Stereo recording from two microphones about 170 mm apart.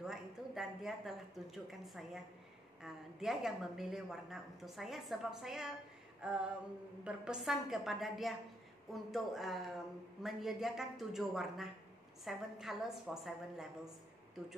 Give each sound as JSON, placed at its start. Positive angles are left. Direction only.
{"t": 0.0, "sound": "a woman's voice", "side_deg": -5}